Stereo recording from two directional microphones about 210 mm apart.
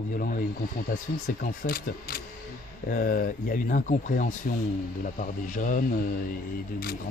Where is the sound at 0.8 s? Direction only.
40° left (ahead or behind).